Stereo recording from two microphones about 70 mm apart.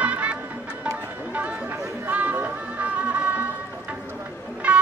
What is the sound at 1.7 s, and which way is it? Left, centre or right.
Music, right.